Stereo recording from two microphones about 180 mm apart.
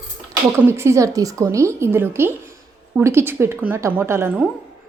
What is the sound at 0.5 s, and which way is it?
A woman's voice, 15° right (ahead or behind).